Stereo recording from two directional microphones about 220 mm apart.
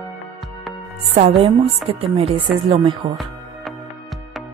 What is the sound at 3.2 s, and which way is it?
Music, centre (ahead or behind).